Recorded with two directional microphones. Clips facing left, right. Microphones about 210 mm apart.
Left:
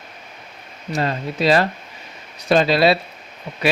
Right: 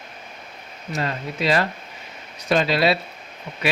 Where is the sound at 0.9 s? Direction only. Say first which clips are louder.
Left 4 dB; 35° left (ahead or behind).